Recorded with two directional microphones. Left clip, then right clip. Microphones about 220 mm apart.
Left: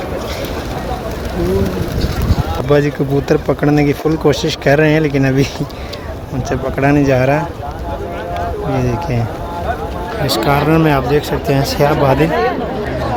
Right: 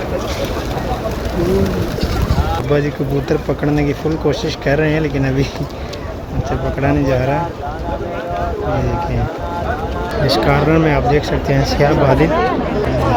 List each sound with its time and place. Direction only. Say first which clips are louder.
2.6 s speech: left 6 dB; 30° left (ahead or behind)
6.7 s speech: left 5 dB; 30° left (ahead or behind)
10.2 s speech: even; 10° left (ahead or behind)